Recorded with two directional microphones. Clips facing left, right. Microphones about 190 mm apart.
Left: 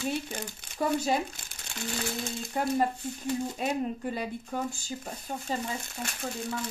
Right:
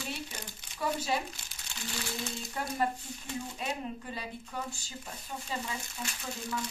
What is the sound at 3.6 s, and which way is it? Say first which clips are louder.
Speech: left 7 dB; 45° left (ahead or behind).